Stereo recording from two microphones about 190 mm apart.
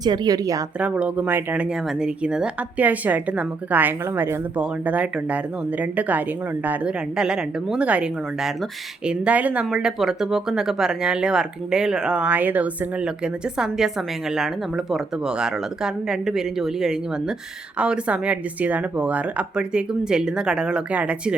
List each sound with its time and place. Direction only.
0.0 s a woman's voice: 20° right (ahead or behind)
0.8 s speech: 5° right (ahead or behind)